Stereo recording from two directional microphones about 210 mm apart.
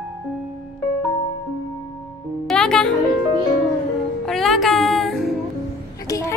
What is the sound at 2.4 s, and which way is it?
Music, 5° left (ahead or behind).